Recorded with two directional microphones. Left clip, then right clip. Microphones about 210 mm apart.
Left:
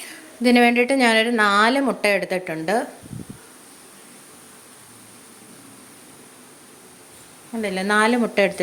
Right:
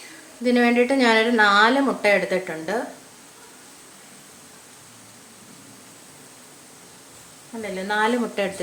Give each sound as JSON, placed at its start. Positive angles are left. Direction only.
{"t": 0.4, "sound": "speech", "side_deg": 40}
{"t": 7.6, "sound": "speech", "side_deg": 40}